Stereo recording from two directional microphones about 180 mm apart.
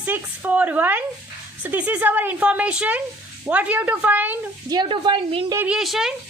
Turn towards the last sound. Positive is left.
turn(degrees=0)  # may be behind; listen again after turning